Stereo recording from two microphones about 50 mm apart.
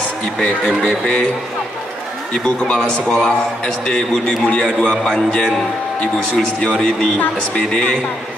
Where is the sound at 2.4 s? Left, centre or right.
Centre.